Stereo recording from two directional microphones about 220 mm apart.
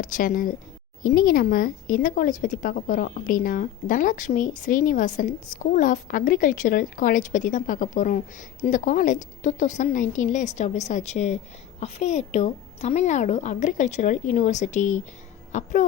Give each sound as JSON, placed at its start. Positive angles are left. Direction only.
{"t": 0.0, "sound": "speech", "side_deg": 40}